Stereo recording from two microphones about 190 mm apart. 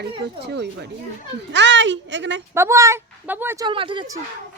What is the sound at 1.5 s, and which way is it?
Speech, 70° right (ahead or behind).